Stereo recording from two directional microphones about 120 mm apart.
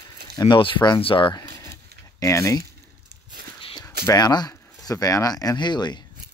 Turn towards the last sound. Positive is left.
turn(degrees=40)  # may be behind; listen again after turning